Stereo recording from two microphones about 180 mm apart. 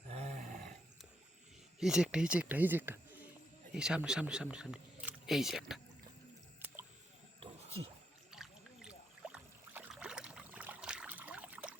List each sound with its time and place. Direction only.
0.1 s roar: 40° right (ahead or behind)
1.8 s speech: 5° right (ahead or behind)
7.3 s a sound: 30° right (ahead or behind)
8.3 s boat: 5° right (ahead or behind)